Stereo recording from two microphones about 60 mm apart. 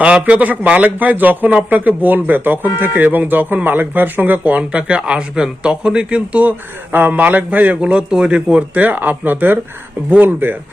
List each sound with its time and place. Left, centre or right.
0.0 s speech: right
6.9 s speech: right